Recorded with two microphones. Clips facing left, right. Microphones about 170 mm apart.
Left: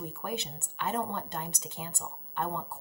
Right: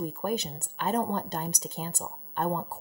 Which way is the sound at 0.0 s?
40° right (ahead or behind).